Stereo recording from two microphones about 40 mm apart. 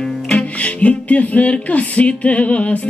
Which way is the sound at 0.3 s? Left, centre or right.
Left.